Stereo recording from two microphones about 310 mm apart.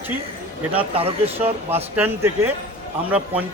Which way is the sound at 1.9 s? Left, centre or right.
Centre.